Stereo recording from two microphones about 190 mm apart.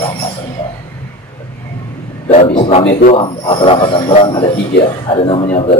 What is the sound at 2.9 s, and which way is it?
Speech, 45° left (ahead or behind).